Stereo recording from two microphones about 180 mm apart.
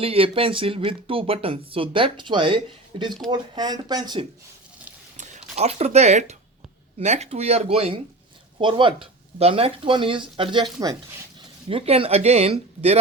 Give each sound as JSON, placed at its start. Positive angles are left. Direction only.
{"t": 0.0, "sound": "speech", "side_deg": -30}
{"t": 5.1, "sound": "speech", "side_deg": -40}